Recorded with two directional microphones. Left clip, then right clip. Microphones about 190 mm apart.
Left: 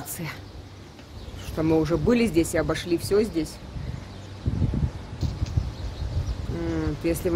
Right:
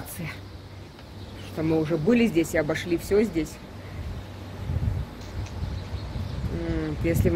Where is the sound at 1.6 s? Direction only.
20° left (ahead or behind).